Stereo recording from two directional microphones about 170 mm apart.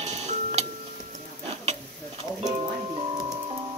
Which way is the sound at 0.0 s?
40° right (ahead or behind).